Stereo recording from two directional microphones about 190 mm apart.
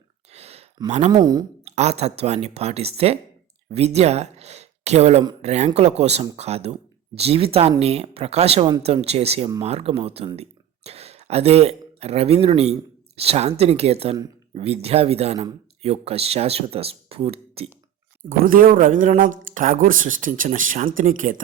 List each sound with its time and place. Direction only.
0.3 s a sound: 35° right (ahead or behind)
0.9 s speech: 35° right (ahead or behind)
1.1 s speech: 20° right (ahead or behind)
1.6 s speech: 35° right (ahead or behind)
18.3 s speech: 45° right (ahead or behind)